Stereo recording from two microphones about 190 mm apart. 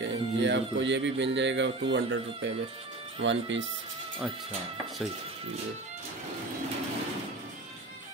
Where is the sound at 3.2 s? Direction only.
75° right (ahead or behind).